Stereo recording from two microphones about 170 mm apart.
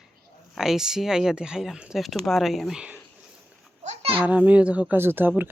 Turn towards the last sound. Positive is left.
turn(degrees=-10)  # may be behind; listen again after turning